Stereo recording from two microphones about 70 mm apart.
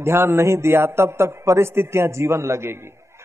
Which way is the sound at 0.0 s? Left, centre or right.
Right.